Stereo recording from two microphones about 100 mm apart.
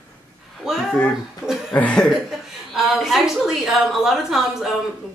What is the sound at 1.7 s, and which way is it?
Chuckle, 15° left (ahead or behind).